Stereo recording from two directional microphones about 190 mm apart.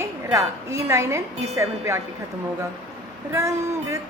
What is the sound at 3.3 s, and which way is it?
Speech, 15° right (ahead or behind).